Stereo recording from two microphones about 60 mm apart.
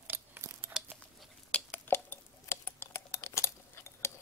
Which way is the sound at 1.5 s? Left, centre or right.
Left.